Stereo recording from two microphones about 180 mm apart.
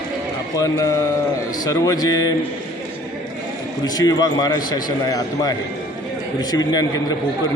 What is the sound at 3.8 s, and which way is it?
A man's voice, 20° left (ahead or behind).